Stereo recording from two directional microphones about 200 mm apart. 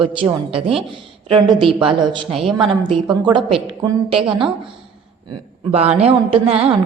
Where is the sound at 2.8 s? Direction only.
25° right (ahead or behind).